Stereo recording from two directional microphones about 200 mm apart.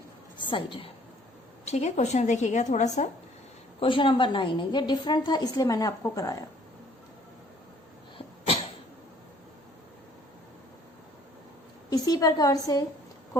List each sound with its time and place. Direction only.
0.3 s a woman's voice: 25° left (ahead or behind)
3.8 s a woman's voice: 25° left (ahead or behind)
11.9 s a woman's voice: 20° left (ahead or behind)